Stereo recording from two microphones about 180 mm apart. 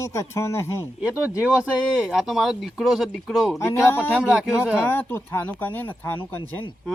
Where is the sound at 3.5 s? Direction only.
15° left (ahead or behind).